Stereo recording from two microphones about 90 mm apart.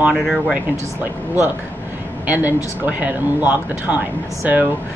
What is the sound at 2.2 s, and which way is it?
Speech, 20° right (ahead or behind).